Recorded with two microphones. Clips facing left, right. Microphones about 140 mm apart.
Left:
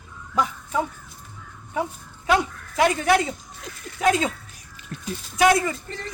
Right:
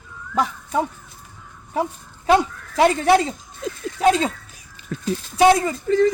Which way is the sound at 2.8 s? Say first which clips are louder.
Right 4 dB; 30° right (ahead or behind).